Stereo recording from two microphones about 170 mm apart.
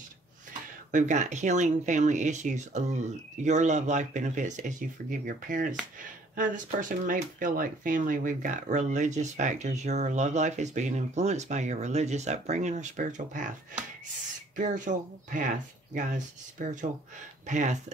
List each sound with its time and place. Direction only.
0.9 s speech: 45° right (ahead or behind)
14.6 s speech: 45° right (ahead or behind)